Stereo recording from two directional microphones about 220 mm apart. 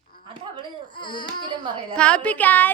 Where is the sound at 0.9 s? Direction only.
20° left (ahead or behind).